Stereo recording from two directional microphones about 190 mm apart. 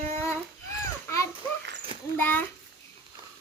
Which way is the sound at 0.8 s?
15° left (ahead or behind).